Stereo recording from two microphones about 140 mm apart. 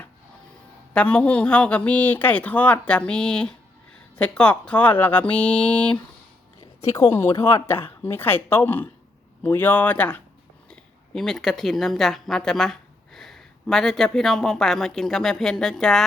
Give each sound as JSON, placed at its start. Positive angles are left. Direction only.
{"t": 0.9, "sound": "speech", "side_deg": 10}
{"t": 6.6, "sound": "a sound", "side_deg": 20}
{"t": 7.2, "sound": "speech", "side_deg": 20}